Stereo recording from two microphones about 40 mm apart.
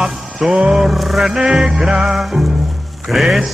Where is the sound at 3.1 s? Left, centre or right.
Centre.